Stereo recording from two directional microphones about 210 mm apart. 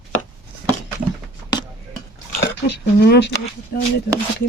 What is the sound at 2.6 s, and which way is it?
Speech, 50° left (ahead or behind).